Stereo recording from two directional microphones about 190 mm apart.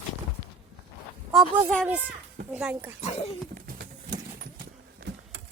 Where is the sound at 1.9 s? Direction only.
10° right (ahead or behind).